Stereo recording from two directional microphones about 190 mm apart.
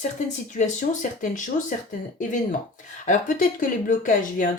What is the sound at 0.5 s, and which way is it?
Speech, 40° left (ahead or behind).